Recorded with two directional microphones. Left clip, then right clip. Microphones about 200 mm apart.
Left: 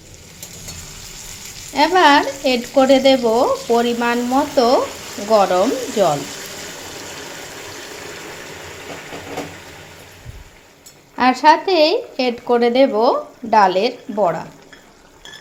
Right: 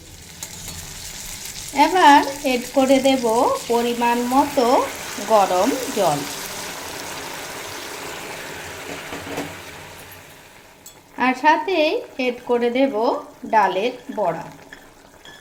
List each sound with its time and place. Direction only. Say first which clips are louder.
1.7 s frying: left 1 dB; 20° left (ahead or behind)
11.2 s frying: left 4 dB; 25° left (ahead or behind)